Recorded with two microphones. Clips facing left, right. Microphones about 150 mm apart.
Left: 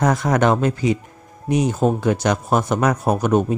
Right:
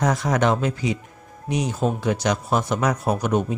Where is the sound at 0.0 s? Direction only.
55° left (ahead or behind).